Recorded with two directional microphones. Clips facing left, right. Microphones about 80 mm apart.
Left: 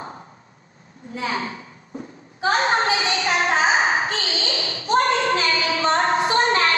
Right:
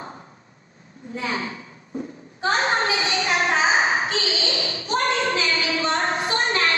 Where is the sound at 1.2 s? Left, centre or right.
Left.